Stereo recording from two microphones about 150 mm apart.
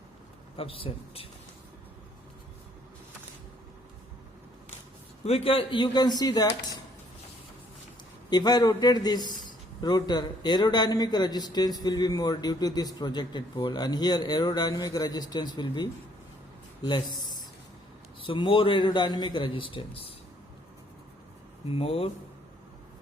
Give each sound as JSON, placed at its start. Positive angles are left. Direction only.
{"t": 0.5, "sound": "a man's voice", "side_deg": 40}
{"t": 5.2, "sound": "a man's voice", "side_deg": 40}
{"t": 8.3, "sound": "a man's voice", "side_deg": 25}
{"t": 21.7, "sound": "a man's voice", "side_deg": 40}